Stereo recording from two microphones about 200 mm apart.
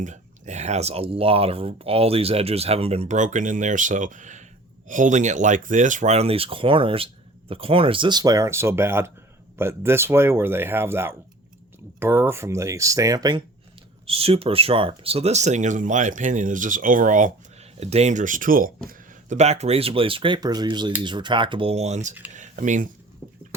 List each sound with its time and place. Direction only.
0.0 s speech: 35° right (ahead or behind)